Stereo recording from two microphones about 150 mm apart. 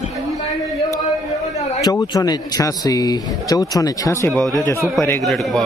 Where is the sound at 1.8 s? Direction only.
25° left (ahead or behind).